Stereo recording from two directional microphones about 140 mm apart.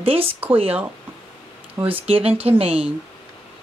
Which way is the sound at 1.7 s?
40° right (ahead or behind).